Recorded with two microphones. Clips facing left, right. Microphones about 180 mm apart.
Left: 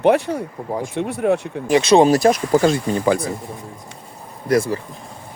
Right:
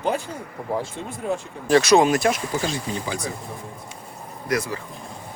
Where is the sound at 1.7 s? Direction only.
25° left (ahead or behind).